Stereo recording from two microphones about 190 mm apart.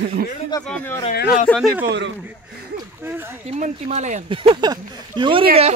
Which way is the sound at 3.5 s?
40° right (ahead or behind).